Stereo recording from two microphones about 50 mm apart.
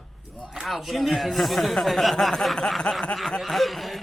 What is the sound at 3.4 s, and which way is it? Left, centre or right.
Speech, centre.